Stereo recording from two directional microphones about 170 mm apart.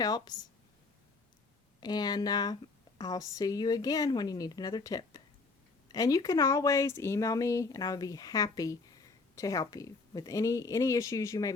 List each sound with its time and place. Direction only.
0.0 s speech: 25° left (ahead or behind)
1.8 s speech: 25° left (ahead or behind)